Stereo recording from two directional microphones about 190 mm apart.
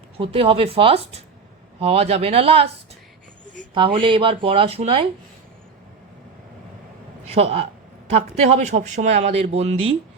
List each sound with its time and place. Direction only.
0.2 s speech: 30° right (ahead or behind)
3.8 s speech: 25° right (ahead or behind)
7.3 s speech: 30° right (ahead or behind)